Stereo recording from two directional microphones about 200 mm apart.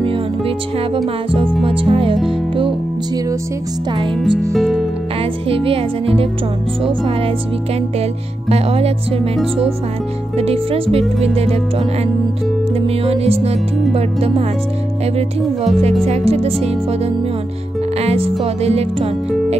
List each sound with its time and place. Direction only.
0.9 s speech: 25° right (ahead or behind)
1.7 s music: 25° right (ahead or behind)
4.2 s speech: centre (ahead or behind)
5.5 s speech: 30° right (ahead or behind)
8.5 s speech: 30° right (ahead or behind)
10.3 s music: 30° right (ahead or behind)
12.8 s music: 30° right (ahead or behind)
16.1 s music: 30° right (ahead or behind)